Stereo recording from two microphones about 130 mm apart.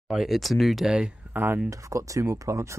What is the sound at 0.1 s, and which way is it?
Speech, centre (ahead or behind).